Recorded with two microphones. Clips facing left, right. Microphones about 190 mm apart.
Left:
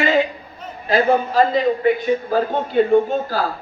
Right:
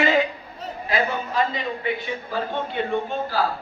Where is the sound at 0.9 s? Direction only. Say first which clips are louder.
Left 9 dB; 35° left (ahead or behind).